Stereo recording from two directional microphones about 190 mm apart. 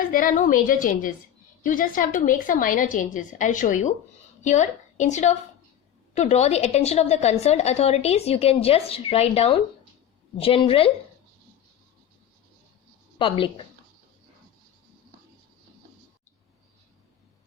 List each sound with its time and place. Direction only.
0.1 s a woman's voice: 45° left (ahead or behind); by 10.9 s 30° left (ahead or behind)
13.1 s speech: 25° left (ahead or behind)